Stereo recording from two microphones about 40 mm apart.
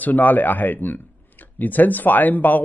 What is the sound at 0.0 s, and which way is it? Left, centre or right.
Speech, left.